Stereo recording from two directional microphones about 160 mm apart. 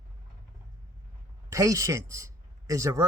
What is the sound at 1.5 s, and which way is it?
Speech, 20° right (ahead or behind).